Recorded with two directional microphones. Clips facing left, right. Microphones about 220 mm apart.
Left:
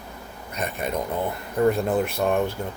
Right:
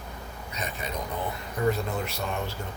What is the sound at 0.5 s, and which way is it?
Speech, 55° left (ahead or behind).